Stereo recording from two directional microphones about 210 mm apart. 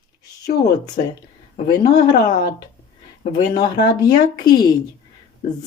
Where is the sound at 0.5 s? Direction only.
45° left (ahead or behind).